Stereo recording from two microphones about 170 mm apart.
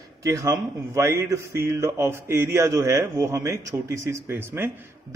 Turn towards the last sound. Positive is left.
turn(degrees=-10)  # may be behind; listen again after turning